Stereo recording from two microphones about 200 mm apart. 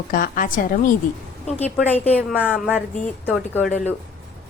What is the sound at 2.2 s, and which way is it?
Speech, 5° right (ahead or behind).